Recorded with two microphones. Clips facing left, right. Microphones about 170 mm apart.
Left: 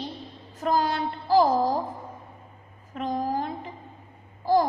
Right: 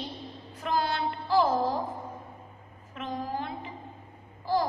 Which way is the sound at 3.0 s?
40° left (ahead or behind).